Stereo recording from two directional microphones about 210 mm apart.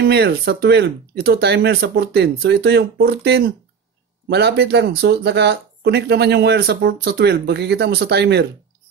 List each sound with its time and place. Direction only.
0.0 s speech: 50° right (ahead or behind)